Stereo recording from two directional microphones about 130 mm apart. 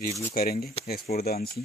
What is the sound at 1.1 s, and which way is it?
Speech, 90° left.